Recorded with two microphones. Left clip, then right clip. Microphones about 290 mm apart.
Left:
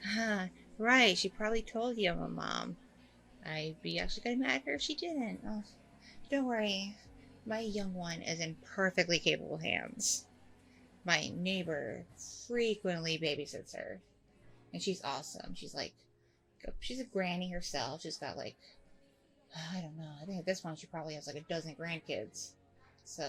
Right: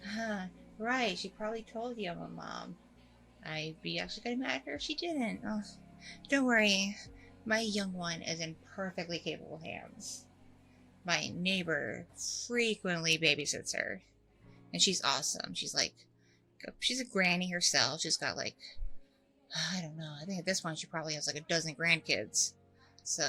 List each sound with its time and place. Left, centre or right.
0.0 s a woman's voice: centre
3.4 s a woman's voice: centre
6.7 s a woman's voice: right
7.5 s speech: centre
8.7 s speech: centre
11.0 s speech: centre
14.8 s speech: centre
21.8 s a woman's voice: right
22.0 s speech: centre